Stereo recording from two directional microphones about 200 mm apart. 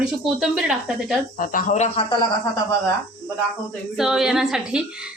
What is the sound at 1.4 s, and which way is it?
Speech, 40° left (ahead or behind).